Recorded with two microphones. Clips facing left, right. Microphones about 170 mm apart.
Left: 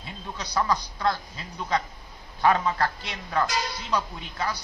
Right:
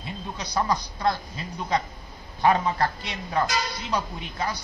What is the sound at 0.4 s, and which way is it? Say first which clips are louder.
A woman's voice: even; 15° right (ahead or behind).